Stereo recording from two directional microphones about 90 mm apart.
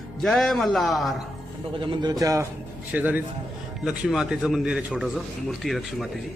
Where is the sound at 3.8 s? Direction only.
5° right (ahead or behind).